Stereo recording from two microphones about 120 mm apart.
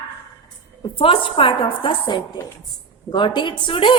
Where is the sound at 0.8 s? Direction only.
45° left (ahead or behind).